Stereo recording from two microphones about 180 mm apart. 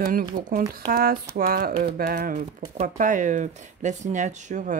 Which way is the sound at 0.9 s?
55° right (ahead or behind).